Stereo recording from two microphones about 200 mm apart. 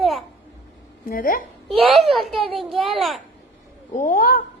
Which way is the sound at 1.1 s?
45° left (ahead or behind).